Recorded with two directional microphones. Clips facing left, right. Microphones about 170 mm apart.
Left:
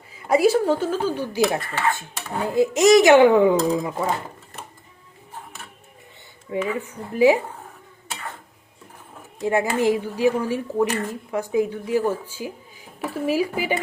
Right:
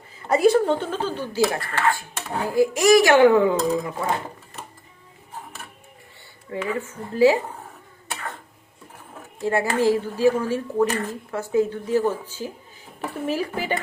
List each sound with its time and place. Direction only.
0.2 s speech: 10° left (ahead or behind)
6.6 s speech: 15° left (ahead or behind)
9.4 s speech: 15° left (ahead or behind)